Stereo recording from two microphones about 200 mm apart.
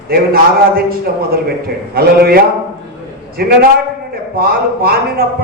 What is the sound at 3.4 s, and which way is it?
A man's voice, 50° right (ahead or behind).